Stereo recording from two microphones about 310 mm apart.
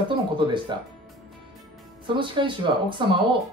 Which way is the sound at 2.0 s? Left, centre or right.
Centre.